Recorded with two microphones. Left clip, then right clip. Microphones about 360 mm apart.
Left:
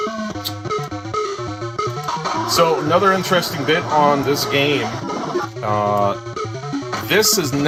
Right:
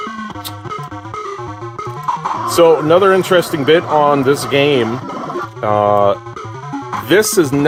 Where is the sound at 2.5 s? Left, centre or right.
Right.